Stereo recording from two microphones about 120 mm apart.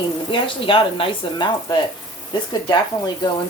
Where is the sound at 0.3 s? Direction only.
45° left (ahead or behind).